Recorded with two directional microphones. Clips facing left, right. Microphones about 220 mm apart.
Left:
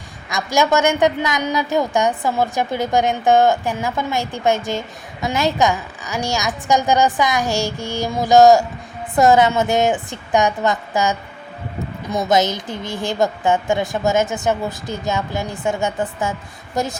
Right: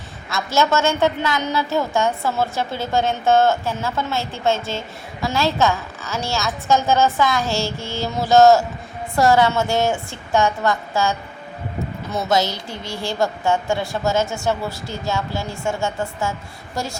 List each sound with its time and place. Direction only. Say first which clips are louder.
0.3 s a woman's voice: left 2 dB; 15° left (ahead or behind)